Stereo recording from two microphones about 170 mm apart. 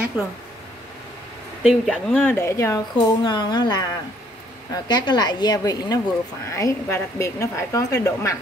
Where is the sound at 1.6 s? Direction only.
Centre (ahead or behind).